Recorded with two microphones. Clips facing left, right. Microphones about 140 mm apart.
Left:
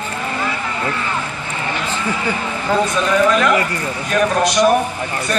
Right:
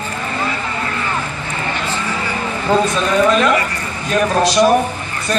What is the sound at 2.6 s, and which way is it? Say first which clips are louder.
A man's voice: right 2 dB; 25° right (ahead or behind).